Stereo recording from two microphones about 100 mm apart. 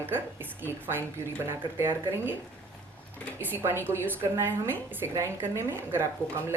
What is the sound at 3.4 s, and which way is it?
A woman's voice, 20° right (ahead or behind).